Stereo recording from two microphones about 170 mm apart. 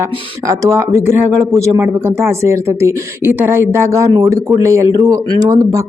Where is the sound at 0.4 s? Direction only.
15° right (ahead or behind).